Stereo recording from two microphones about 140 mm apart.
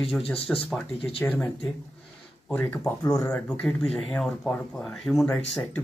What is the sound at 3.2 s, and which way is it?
Speech, 10° left (ahead or behind).